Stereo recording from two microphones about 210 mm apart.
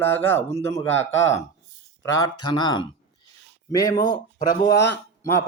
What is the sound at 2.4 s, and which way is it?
Speech, 20° left (ahead or behind).